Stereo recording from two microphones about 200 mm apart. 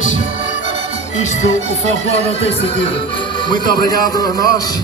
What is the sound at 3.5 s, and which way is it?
Music, 20° left (ahead or behind).